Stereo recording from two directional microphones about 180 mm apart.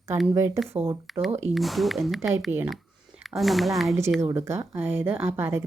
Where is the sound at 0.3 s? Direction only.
15° right (ahead or behind).